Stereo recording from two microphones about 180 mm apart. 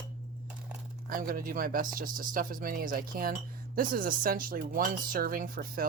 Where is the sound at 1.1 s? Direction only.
50° right (ahead or behind).